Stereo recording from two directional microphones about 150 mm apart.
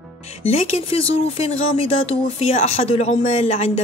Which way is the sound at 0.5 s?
40° left (ahead or behind).